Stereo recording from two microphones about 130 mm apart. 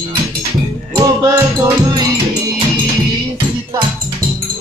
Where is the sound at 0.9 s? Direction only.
25° right (ahead or behind).